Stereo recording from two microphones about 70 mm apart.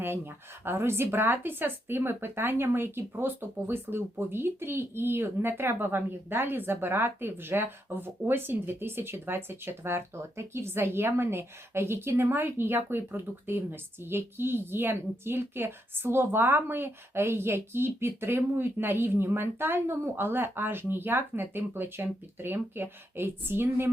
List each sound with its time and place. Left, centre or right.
0.6 s speech: right